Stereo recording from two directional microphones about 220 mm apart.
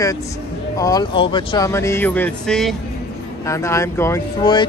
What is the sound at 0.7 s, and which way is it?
Speech, 15° left (ahead or behind).